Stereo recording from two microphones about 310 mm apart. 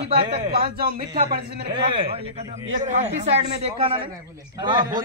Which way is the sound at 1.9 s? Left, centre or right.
Centre.